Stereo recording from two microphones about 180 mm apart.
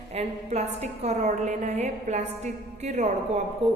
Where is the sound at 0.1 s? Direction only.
35° right (ahead or behind).